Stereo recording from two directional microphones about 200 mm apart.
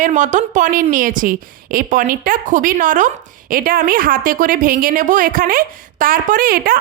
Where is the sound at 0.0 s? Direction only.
40° right (ahead or behind).